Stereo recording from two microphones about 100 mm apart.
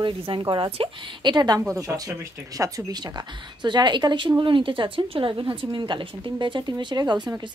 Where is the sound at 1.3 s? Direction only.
40° right (ahead or behind).